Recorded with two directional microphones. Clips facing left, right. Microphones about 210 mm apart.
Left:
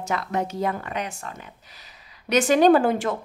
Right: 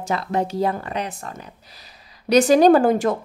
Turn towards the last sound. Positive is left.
turn(degrees=-40)  # may be behind; listen again after turning